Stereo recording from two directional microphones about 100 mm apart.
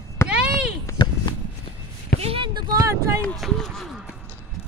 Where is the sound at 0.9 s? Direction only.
30° left (ahead or behind).